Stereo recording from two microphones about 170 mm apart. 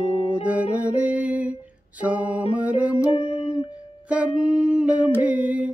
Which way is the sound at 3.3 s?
5° right (ahead or behind).